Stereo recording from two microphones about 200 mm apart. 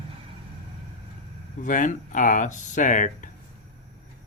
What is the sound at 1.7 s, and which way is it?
Speech, 40° left (ahead or behind).